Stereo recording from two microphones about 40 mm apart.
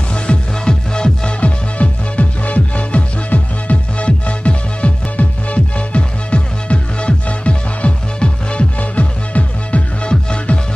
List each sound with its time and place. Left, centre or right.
0.1 s music: left
1.4 s music: left
8.7 s music: left